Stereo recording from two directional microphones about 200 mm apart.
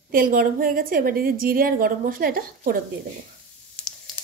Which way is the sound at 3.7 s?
5° left (ahead or behind).